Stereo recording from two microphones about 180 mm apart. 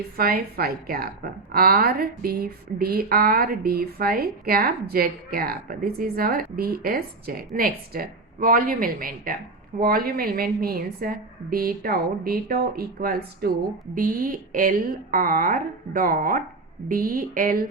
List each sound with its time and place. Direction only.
0.2 s a woman's voice: 55° right (ahead or behind)